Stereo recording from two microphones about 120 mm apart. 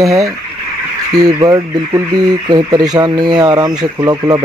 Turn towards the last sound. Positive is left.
turn(degrees=-35)  # may be behind; listen again after turning